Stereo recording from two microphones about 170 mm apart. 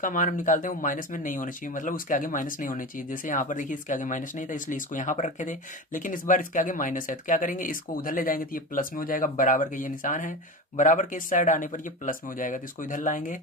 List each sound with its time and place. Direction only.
0.0 s speech: 50° left (ahead or behind)